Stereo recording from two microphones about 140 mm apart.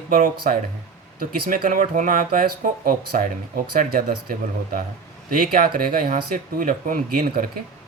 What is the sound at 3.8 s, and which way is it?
Speech, 90° right.